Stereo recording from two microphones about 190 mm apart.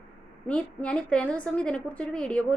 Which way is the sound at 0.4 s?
5° left (ahead or behind).